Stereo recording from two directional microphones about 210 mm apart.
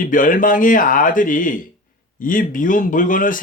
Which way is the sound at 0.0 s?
40° left (ahead or behind).